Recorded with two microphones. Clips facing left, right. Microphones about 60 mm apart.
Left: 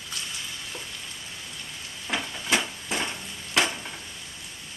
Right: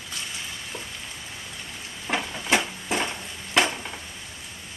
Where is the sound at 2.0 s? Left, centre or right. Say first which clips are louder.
Right 3 dB; right.